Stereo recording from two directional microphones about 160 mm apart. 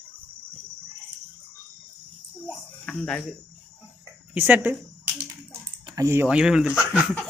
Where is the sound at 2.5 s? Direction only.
5° left (ahead or behind).